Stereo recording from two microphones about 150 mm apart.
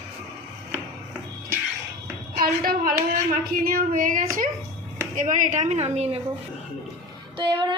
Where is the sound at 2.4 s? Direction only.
75° right (ahead or behind); by 6.2 s 45° right (ahead or behind).